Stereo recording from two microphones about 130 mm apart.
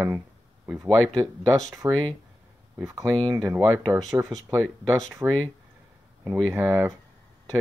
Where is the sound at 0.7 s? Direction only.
5° right (ahead or behind).